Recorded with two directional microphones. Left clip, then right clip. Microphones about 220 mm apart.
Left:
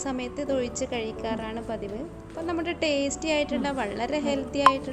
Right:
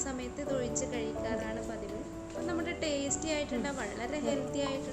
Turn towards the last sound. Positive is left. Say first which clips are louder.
# left 12 dB
turn(degrees=35)  # may be behind; listen again after turning